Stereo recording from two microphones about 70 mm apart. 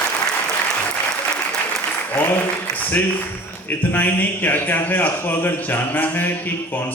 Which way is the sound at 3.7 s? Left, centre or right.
Left.